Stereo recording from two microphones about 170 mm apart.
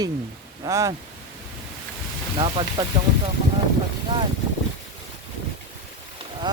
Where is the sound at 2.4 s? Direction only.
30° right (ahead or behind).